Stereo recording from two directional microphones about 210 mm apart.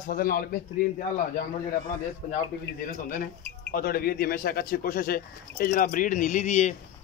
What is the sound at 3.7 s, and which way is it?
A man's voice, 45° left (ahead or behind).